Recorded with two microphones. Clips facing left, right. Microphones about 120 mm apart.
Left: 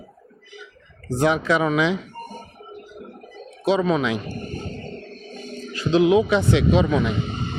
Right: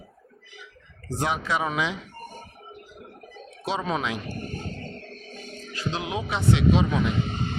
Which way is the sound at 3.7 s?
90° left.